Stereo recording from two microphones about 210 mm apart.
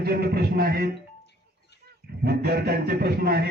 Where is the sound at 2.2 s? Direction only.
45° right (ahead or behind).